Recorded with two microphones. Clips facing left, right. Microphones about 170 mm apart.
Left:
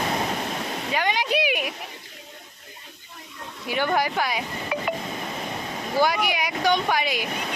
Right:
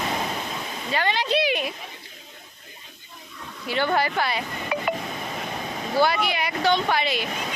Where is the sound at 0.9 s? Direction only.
10° left (ahead or behind).